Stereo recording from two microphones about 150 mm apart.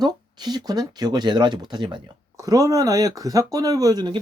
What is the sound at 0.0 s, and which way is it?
Speech, 25° right (ahead or behind).